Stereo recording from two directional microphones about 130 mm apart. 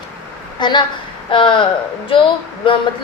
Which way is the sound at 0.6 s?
35° left (ahead or behind).